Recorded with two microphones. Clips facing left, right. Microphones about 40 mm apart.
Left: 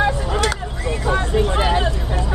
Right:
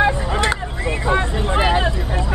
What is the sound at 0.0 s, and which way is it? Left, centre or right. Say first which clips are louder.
Vehicle: right 1 dB; right.